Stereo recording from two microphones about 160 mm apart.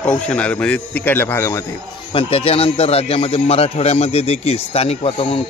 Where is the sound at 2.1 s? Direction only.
35° left (ahead or behind).